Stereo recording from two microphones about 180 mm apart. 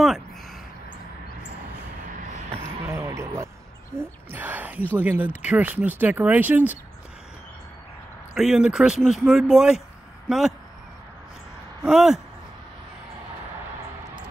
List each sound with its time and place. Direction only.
2.6 s a sound: 15° right (ahead or behind)
3.9 s speech: 15° right (ahead or behind)
4.3 s a sound: 10° right (ahead or behind)
4.9 s speech: 10° right (ahead or behind)
8.4 s speech: 5° right (ahead or behind)
11.8 s speech: 5° right (ahead or behind)